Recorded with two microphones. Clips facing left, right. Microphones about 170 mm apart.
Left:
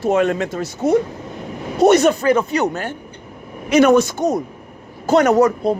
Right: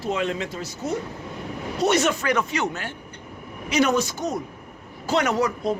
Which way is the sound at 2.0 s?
30° left (ahead or behind).